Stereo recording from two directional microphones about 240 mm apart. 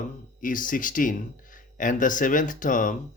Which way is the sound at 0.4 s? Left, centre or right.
Left.